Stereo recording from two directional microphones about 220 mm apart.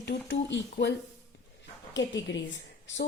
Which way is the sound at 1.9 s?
55° left (ahead or behind).